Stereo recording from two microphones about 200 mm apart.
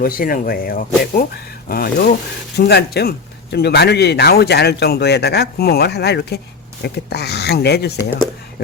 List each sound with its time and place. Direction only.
0.0 s speech: 45° left (ahead or behind)